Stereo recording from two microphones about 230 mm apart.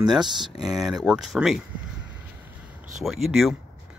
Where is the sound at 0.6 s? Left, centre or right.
Centre.